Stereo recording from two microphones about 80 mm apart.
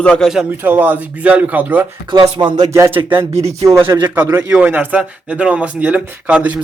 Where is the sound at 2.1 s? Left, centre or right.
Right.